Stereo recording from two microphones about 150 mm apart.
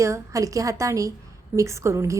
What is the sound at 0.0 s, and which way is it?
A woman's voice, 20° right (ahead or behind).